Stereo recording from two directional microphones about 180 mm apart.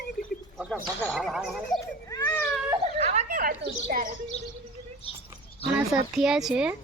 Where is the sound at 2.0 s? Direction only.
20° left (ahead or behind).